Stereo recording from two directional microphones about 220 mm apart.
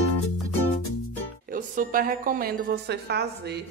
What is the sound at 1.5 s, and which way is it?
A woman's voice, 40° right (ahead or behind).